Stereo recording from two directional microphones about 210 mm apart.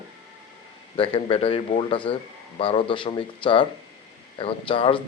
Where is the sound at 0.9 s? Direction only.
25° left (ahead or behind).